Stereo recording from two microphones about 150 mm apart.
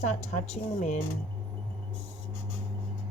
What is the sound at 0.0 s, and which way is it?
A woman's voice, 45° left (ahead or behind).